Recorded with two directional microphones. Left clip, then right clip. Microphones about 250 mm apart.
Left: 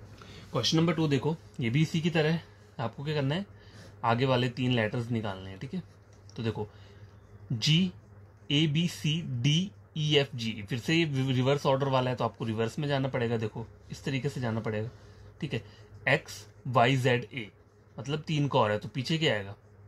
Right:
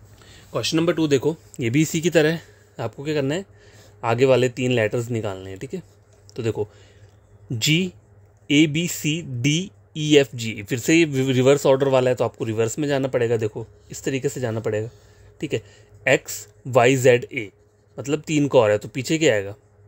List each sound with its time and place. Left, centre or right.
0.3 s a man's voice: right